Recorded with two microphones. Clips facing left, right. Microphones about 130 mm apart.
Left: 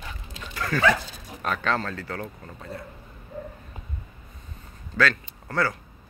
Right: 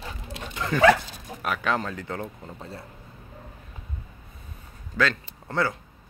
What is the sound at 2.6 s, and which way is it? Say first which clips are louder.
Speech: left 4 dB; 30° right (ahead or behind).